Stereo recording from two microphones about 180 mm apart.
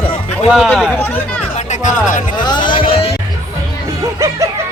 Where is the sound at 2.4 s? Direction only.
25° left (ahead or behind).